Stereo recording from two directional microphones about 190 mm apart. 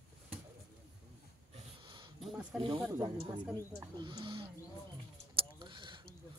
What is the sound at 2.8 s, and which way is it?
Speech, 25° right (ahead or behind).